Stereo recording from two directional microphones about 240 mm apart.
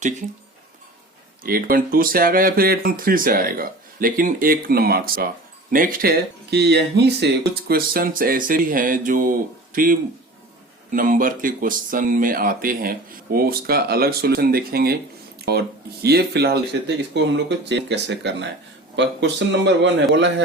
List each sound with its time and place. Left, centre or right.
1.5 s speech: right